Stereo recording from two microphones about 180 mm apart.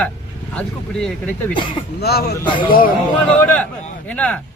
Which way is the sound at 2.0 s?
60° left (ahead or behind).